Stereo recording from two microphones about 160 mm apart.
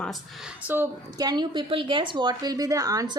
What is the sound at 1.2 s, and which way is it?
A woman's voice, 25° right (ahead or behind).